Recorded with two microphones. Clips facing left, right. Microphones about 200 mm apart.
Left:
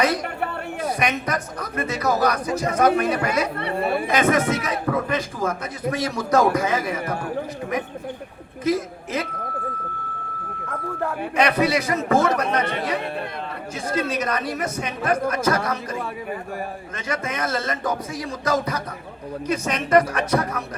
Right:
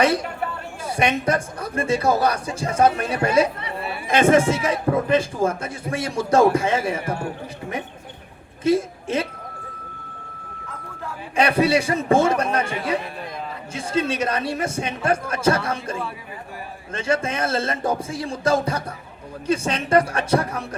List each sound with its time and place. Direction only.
0.9 s a man's voice: 30° right (ahead or behind)
3.6 s speech: 50° left (ahead or behind)
4.1 s a man's voice: 30° right (ahead or behind)
8.6 s a woman's voice: 30° right (ahead or behind)
10.7 s ice cream truck: 60° left (ahead or behind)
11.3 s a man's voice: 30° right (ahead or behind)
13.7 s a man's voice: 30° right (ahead or behind)